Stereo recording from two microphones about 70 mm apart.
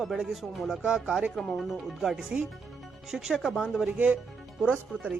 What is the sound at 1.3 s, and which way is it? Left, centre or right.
Speech, centre.